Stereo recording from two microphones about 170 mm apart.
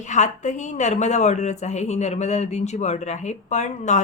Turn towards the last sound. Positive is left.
turn(degrees=45)  # may be behind; listen again after turning